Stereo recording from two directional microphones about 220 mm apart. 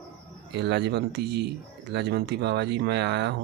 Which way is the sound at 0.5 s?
50° right (ahead or behind).